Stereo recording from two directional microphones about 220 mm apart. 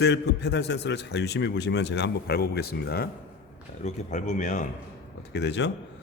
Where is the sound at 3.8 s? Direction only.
30° left (ahead or behind).